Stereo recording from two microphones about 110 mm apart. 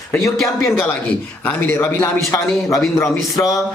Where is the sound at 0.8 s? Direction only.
10° left (ahead or behind).